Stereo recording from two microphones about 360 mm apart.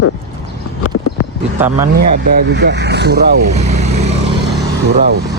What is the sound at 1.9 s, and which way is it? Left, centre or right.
Speech, right.